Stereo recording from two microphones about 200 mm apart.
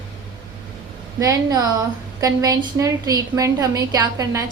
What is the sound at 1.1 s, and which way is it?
A woman's voice, 15° right (ahead or behind).